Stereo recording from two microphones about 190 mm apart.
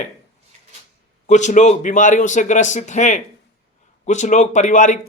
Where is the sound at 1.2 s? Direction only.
40° left (ahead or behind).